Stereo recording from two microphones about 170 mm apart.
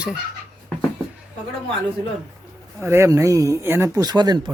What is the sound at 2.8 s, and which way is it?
Speech, 15° right (ahead or behind).